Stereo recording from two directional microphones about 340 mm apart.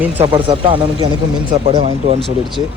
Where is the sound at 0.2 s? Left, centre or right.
Centre.